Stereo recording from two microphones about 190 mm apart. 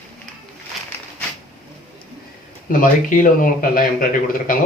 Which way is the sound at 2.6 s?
45° left (ahead or behind).